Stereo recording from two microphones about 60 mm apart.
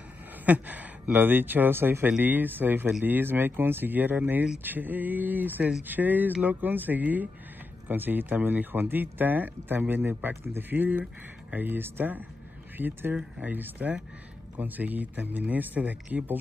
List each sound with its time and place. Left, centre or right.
0.5 s speech: right